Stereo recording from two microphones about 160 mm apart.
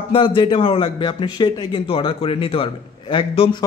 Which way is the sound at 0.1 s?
30° left (ahead or behind).